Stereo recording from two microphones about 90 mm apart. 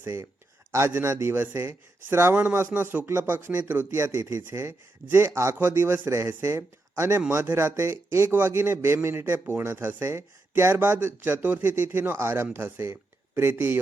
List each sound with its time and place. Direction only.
0.0 s a man's voice: 25° right (ahead or behind)